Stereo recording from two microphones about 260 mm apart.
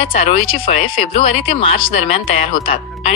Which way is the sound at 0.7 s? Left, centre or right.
Left.